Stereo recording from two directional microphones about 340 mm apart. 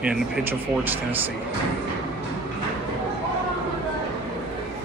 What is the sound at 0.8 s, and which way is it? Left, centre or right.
Speech, centre.